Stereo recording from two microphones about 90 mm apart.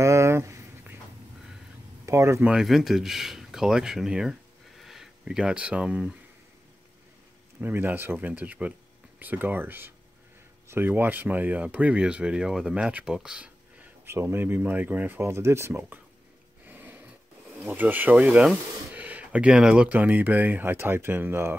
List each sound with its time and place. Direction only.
0.0 s a sound: 30° right (ahead or behind)
2.0 s speech: 35° right (ahead or behind)
2.6 s speech: centre (ahead or behind)
7.6 s speech: 25° right (ahead or behind)
14.0 s speech: 25° right (ahead or behind)
16.6 s a sound: 20° right (ahead or behind)
17.6 s speech: 20° right (ahead or behind)